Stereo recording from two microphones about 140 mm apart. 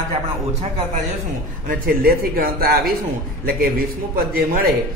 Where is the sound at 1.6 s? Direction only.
90° right.